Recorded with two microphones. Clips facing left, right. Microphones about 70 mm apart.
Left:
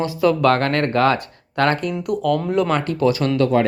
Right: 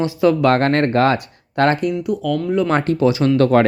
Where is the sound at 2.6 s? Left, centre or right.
Right.